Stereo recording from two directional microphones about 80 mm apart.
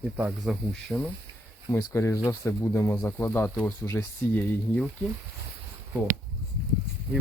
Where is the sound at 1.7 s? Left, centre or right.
Left; by 4.8 s centre.